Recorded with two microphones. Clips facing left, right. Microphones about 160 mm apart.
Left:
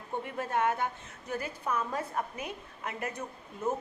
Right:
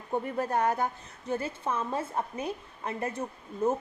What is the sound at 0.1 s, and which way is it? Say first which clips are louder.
Speech: right 4 dB; 40° right (ahead or behind).